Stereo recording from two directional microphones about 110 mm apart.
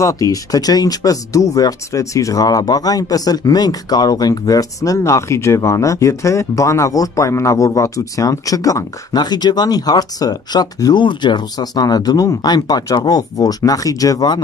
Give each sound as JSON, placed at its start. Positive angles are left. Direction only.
{"t": 0.0, "sound": "speech", "side_deg": 30}